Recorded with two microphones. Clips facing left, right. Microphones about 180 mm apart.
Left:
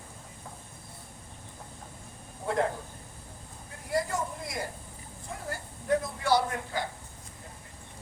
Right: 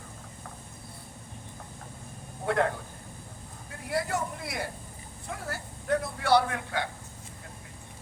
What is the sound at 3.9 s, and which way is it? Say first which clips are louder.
Speech: even; 65° right (ahead or behind).